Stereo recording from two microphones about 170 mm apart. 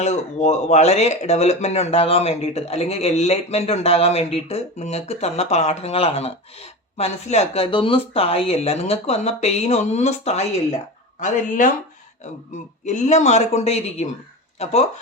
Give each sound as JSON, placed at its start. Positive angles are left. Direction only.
{"t": 0.0, "sound": "speech", "side_deg": 40}
{"t": 11.2, "sound": "a man's voice", "side_deg": 50}
{"t": 12.8, "sound": "a man's voice", "side_deg": 45}